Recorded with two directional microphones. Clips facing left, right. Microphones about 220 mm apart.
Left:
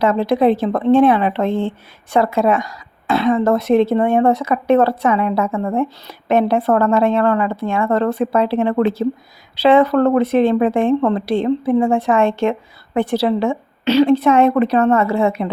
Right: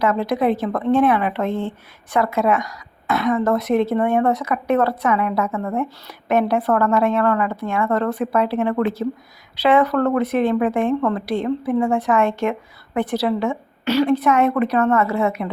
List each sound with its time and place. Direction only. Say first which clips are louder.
0.0 s a woman's voice: left 4 dB; 30° left (ahead or behind)